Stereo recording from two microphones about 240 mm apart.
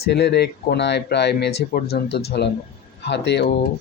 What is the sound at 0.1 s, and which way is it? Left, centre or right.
Speech, left.